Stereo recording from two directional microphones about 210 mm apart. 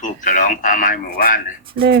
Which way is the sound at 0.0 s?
40° left (ahead or behind).